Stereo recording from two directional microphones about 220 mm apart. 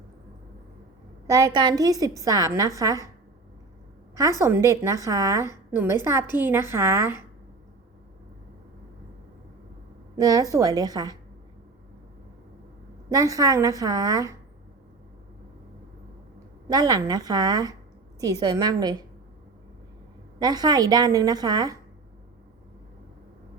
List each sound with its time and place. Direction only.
1.3 s a woman's voice: 15° right (ahead or behind)
4.1 s a woman's voice: 15° right (ahead or behind)
10.2 s a woman's voice: 15° right (ahead or behind)
13.1 s a woman's voice: 15° right (ahead or behind)
16.6 s a woman's voice: 15° right (ahead or behind)
20.4 s a woman's voice: 20° right (ahead or behind)